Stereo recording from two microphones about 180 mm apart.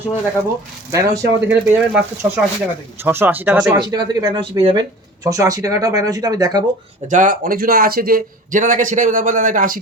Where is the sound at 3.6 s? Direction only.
25° right (ahead or behind).